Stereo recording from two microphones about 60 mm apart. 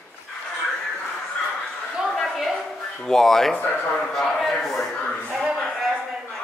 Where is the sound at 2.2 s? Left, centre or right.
Centre.